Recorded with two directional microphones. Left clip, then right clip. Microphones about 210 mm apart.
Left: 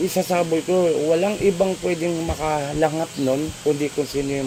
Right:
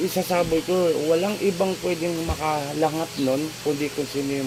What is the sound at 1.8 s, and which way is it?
Speech, 25° left (ahead or behind).